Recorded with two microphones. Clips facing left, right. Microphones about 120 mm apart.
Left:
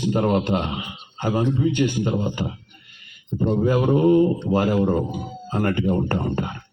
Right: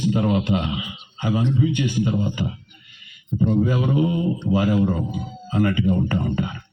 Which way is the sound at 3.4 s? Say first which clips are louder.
Left 1 dB; 35° left (ahead or behind).